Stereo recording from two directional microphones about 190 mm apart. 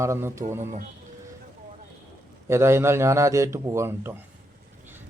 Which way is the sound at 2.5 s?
15° right (ahead or behind).